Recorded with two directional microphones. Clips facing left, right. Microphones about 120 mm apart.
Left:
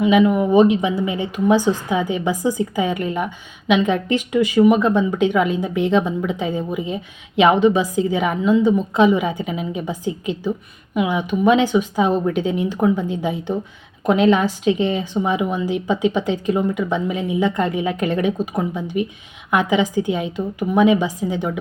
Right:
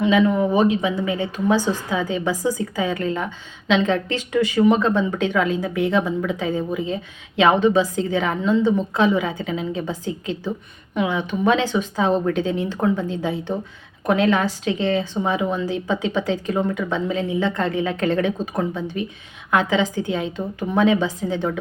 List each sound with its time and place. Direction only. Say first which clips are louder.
0.0 s a woman's voice: left 2 dB; 15° left (ahead or behind)